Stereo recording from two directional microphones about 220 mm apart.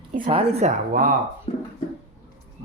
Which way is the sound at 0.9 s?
40° right (ahead or behind).